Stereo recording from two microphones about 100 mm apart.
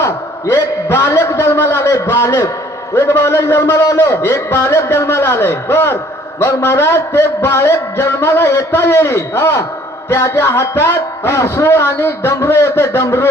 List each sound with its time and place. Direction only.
0.5 s a man's voice: 30° left (ahead or behind)